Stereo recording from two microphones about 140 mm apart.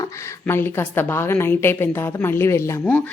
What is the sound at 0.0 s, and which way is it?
A woman's voice, 20° left (ahead or behind).